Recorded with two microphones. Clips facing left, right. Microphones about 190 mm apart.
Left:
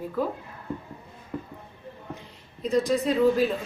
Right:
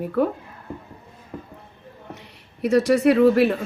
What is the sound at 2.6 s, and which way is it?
Speech, 75° right (ahead or behind).